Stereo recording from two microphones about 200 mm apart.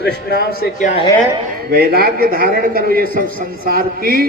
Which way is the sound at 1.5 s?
50° right (ahead or behind).